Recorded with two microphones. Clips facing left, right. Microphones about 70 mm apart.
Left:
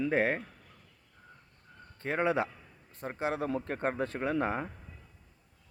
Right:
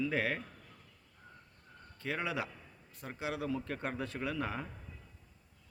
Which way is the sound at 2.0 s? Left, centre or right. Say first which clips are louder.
Left 7 dB; left.